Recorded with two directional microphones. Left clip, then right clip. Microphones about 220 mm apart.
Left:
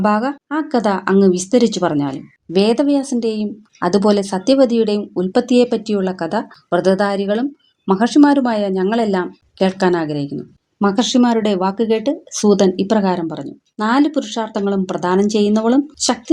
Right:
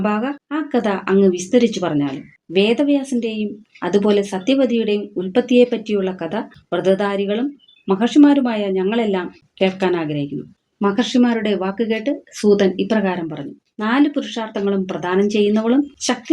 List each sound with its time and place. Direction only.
0.0 s speech: 40° left (ahead or behind)